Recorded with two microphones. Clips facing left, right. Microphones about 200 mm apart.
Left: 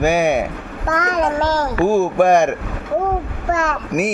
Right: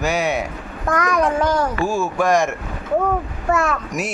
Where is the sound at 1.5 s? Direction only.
60° left (ahead or behind).